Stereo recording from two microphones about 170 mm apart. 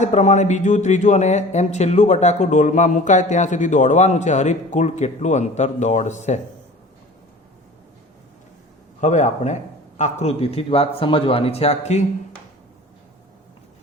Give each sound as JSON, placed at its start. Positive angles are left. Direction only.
{"t": 0.0, "sound": "speech", "side_deg": 45}
{"t": 9.0, "sound": "speech", "side_deg": 45}